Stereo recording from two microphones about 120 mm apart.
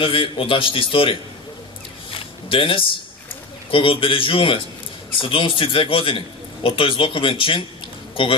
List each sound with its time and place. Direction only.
0.0 s a man's voice: 45° left (ahead or behind)
2.1 s a sound: 45° left (ahead or behind)
3.7 s a man's voice: 45° left (ahead or behind)